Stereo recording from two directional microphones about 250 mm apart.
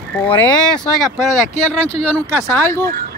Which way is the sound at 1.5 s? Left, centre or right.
Left.